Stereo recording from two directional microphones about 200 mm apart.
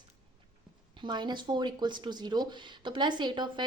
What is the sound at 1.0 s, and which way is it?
Speech, 20° right (ahead or behind).